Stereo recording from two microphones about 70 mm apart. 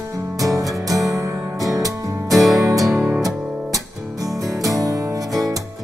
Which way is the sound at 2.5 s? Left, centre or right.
Right.